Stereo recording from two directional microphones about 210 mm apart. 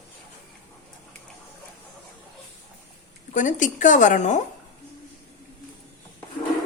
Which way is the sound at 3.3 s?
35° left (ahead or behind).